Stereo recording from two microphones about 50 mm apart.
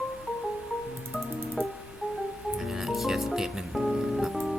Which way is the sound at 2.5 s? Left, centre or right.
Centre.